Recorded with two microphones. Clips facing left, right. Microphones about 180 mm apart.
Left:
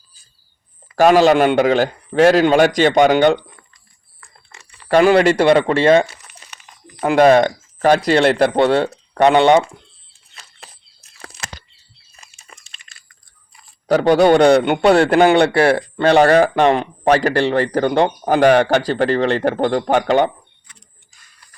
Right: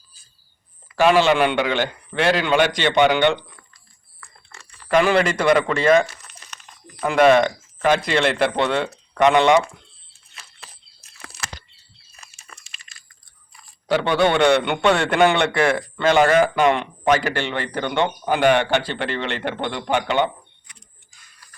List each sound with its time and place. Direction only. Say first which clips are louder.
0.9 s a man's voice: left 5 dB; 40° left (ahead or behind)
4.5 s a sound: left 1 dB; 15° left (ahead or behind)
4.9 s a man's voice: left 6 dB; 35° left (ahead or behind)
12.5 s crunch: left 1 dB; 20° left (ahead or behind)
13.8 s a man's voice: left 6 dB; 40° left (ahead or behind)